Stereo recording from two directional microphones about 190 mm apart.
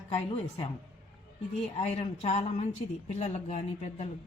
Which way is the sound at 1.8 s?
30° left (ahead or behind).